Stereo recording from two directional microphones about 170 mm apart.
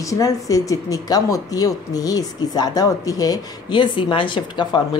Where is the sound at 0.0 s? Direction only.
20° left (ahead or behind).